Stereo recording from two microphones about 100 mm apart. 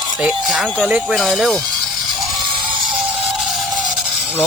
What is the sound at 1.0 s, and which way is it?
Speech, centre (ahead or behind).